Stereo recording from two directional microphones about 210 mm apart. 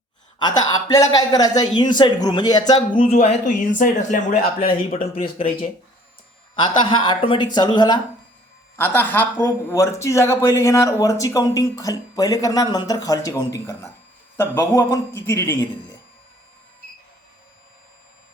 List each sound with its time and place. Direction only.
0.3 s speech: 20° left (ahead or behind)
6.6 s a man's voice: 20° left (ahead or behind)